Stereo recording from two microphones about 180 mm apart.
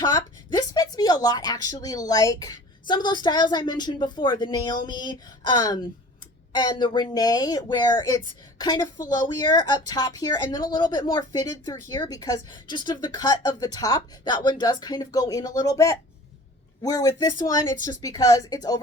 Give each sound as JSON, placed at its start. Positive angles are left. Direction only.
{"t": 0.0, "sound": "speech", "side_deg": 25}